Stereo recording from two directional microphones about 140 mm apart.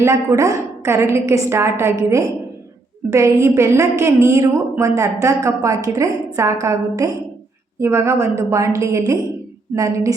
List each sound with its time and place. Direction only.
0.0 s a woman's voice: 20° right (ahead or behind)